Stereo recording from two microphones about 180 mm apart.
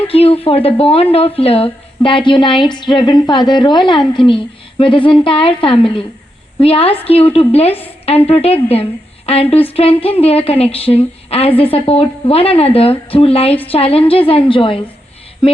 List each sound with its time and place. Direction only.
0.1 s a woman's voice: 35° left (ahead or behind)